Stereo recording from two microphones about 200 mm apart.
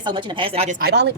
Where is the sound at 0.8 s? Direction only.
55° right (ahead or behind).